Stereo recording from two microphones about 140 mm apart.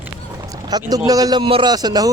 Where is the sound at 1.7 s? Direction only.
30° right (ahead or behind).